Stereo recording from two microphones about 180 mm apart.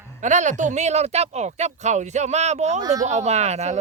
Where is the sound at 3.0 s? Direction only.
40° right (ahead or behind).